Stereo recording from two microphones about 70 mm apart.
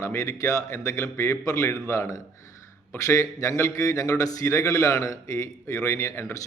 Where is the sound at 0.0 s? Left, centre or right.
Left.